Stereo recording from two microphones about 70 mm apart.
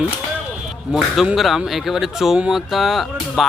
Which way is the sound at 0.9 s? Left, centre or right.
Centre.